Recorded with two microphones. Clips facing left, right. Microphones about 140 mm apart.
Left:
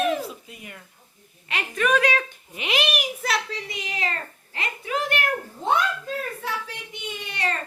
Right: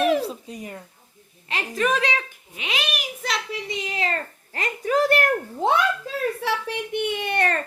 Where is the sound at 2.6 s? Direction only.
5° left (ahead or behind).